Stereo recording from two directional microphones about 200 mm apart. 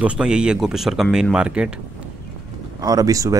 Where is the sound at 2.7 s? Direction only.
20° right (ahead or behind).